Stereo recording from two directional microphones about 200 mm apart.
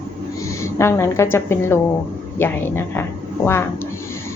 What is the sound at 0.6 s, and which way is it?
A woman's voice, 15° left (ahead or behind).